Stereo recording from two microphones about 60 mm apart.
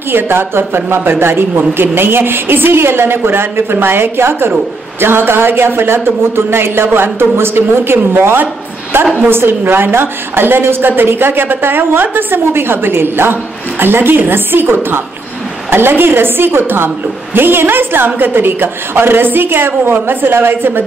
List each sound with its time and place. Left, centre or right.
0.1 s a woman's voice: right